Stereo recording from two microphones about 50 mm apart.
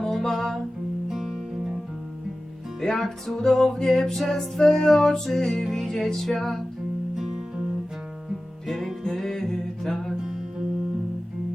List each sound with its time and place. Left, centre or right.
0.0 s music: centre
1.0 s music: centre
2.8 s music: centre
7.2 s music: centre